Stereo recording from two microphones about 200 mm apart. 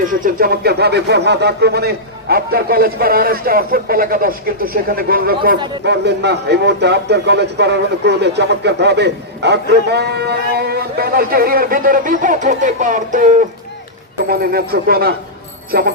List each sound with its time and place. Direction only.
0.0 s speech: 40° right (ahead or behind)